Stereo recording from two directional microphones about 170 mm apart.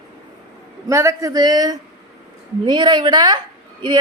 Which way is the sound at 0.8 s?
15° right (ahead or behind).